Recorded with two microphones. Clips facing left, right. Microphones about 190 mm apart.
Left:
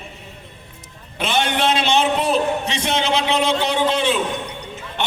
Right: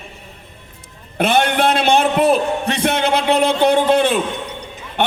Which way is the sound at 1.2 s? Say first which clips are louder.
Right 5 dB; 55° right (ahead or behind).